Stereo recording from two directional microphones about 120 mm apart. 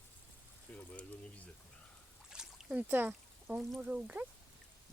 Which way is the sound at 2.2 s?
5° right (ahead or behind).